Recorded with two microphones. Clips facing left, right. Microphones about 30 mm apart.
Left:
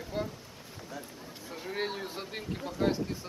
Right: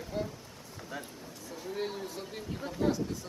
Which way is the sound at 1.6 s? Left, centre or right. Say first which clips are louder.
Left 1 dB; left.